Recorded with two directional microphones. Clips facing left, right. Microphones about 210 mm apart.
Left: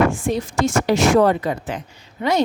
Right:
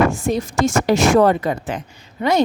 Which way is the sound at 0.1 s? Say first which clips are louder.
Right 1 dB; 40° right (ahead or behind).